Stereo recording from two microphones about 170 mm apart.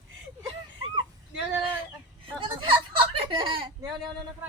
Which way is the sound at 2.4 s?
30° right (ahead or behind).